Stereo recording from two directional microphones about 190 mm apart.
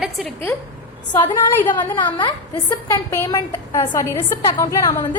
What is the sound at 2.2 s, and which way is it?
A woman's voice, 20° left (ahead or behind).